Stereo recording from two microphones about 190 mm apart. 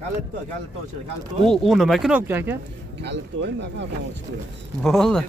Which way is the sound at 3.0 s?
65° right (ahead or behind).